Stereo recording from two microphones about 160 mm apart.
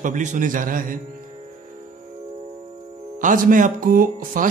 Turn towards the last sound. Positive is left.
turn(degrees=-60)  # may be behind; listen again after turning